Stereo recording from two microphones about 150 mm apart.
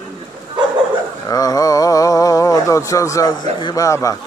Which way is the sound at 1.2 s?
25° left (ahead or behind).